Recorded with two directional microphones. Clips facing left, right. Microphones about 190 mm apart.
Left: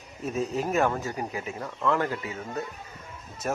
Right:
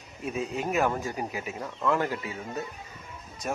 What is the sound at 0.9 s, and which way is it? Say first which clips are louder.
Speech: left 1 dB; 10° right (ahead or behind).